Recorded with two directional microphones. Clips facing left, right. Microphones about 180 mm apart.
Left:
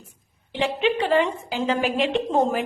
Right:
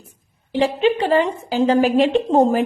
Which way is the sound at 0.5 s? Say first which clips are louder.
Right 5 dB; 35° right (ahead or behind).